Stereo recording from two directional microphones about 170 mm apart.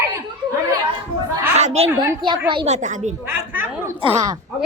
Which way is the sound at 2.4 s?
30° right (ahead or behind).